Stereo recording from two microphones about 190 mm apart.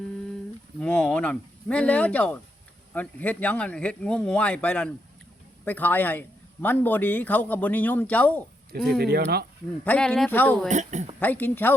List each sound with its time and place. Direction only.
0.8 s a man's voice: 5° left (ahead or behind)
9.0 s speech: 55° right (ahead or behind)
9.8 s a man's voice: 10° left (ahead or behind)
10.7 s speech: 40° right (ahead or behind)
11.2 s a man's voice: 10° left (ahead or behind)